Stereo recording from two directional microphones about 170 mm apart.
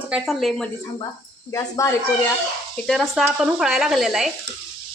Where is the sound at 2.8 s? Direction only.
Centre (ahead or behind).